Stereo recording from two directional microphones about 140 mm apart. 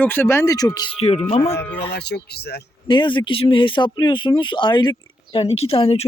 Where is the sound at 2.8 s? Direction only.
35° left (ahead or behind).